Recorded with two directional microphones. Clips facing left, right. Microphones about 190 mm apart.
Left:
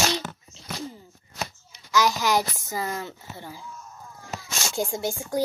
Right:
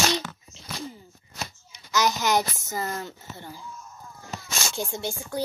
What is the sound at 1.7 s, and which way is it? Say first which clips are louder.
A child's voice: left 2 dB; centre (ahead or behind).